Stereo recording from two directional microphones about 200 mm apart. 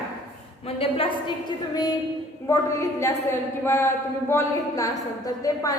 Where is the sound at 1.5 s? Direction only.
20° left (ahead or behind).